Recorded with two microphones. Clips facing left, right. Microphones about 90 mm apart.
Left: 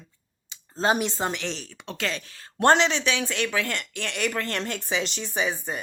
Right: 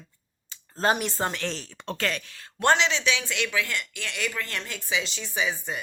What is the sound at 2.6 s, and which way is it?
Speech, 45° left (ahead or behind).